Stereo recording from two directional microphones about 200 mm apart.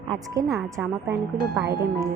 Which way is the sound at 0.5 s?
5° right (ahead or behind).